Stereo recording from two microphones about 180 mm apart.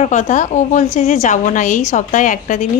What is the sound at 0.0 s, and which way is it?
A woman's voice, 40° left (ahead or behind).